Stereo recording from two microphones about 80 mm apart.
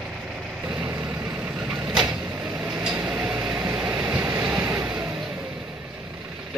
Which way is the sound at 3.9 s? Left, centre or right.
Right.